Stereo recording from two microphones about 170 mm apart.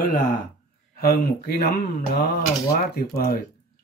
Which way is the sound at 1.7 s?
70° left (ahead or behind).